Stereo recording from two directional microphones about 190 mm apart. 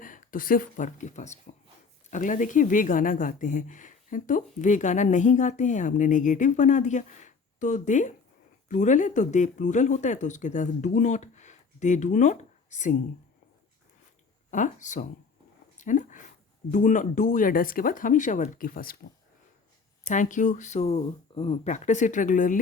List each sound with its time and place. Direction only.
0.0 s speech: 45° left (ahead or behind)
14.5 s speech: 40° left (ahead or behind)
15.8 s a sound: 40° left (ahead or behind)
16.7 s speech: 45° left (ahead or behind)
20.1 s speech: 40° left (ahead or behind)